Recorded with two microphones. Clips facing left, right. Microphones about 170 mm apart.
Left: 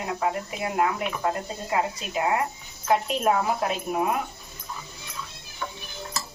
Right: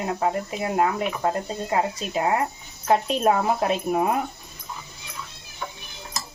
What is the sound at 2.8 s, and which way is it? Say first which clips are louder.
Speech: right 3 dB; 30° right (ahead or behind).